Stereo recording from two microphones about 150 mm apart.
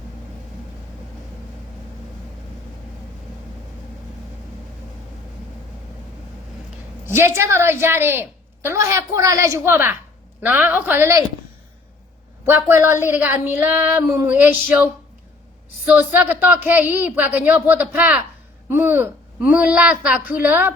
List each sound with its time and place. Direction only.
7.0 s a woman's voice: 15° right (ahead or behind)
12.5 s a woman's voice: 15° right (ahead or behind)
15.9 s a woman's voice: 10° right (ahead or behind)